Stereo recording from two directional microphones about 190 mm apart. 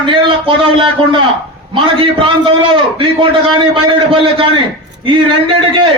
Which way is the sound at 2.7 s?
25° right (ahead or behind).